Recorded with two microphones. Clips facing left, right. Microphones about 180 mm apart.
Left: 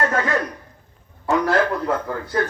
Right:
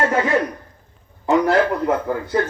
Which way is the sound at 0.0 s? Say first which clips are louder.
Right 3 dB; 20° right (ahead or behind).